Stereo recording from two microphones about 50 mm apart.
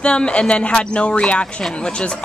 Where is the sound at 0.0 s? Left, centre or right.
Centre.